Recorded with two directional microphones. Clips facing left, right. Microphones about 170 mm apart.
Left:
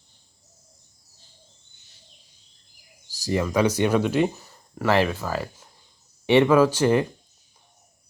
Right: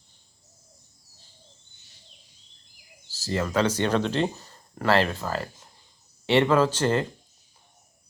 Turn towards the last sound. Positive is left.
turn(degrees=10)  # may be behind; listen again after turning